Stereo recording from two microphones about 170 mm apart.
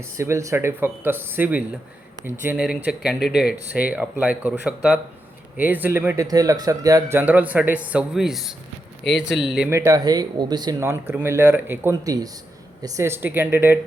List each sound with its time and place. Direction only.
0.0 s speech: 15° right (ahead or behind)
9.6 s speech: 20° right (ahead or behind)